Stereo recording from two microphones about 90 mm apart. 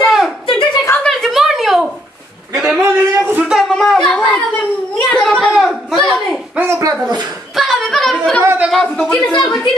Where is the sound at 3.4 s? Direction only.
Centre (ahead or behind).